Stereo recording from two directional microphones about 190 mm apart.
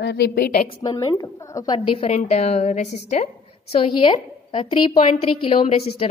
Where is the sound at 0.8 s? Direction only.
20° left (ahead or behind).